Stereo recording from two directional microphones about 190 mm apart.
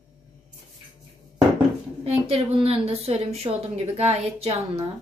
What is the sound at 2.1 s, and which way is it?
A woman's voice, 30° right (ahead or behind).